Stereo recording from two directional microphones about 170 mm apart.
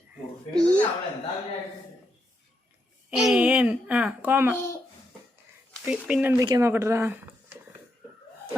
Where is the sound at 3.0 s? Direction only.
5° right (ahead or behind).